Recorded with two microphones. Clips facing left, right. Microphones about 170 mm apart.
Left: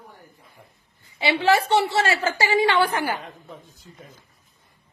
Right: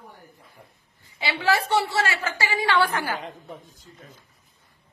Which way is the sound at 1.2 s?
25° left (ahead or behind).